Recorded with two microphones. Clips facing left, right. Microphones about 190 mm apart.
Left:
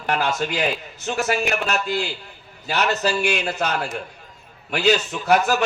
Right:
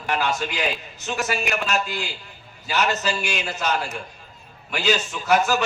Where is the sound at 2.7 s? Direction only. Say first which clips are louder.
Left 2 dB; 60° left (ahead or behind).